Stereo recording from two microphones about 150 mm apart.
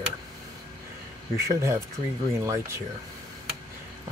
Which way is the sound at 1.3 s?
20° right (ahead or behind).